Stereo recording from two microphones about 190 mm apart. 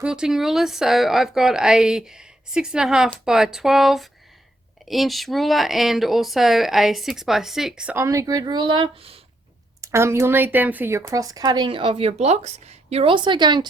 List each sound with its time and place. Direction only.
0.0 s speech: 5° right (ahead or behind); by 9.2 s 30° right (ahead or behind)
9.8 s speech: 15° right (ahead or behind)